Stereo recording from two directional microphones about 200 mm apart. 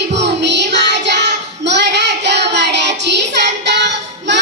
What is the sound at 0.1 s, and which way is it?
Child singing, 60° right (ahead or behind).